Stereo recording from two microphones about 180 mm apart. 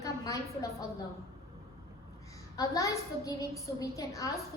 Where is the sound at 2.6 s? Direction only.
15° left (ahead or behind).